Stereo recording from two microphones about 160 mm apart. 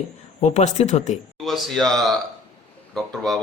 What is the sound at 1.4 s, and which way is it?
Speech, centre (ahead or behind).